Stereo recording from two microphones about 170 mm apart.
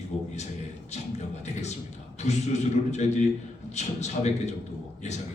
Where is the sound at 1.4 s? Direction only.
40° left (ahead or behind).